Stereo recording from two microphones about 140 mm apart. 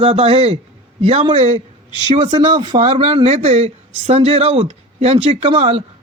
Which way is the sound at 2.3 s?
35° right (ahead or behind).